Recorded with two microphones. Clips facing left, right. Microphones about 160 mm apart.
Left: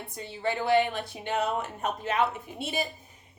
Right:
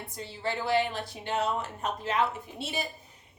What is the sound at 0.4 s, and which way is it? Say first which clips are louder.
A woman's voice: left 3 dB; 55° left (ahead or behind).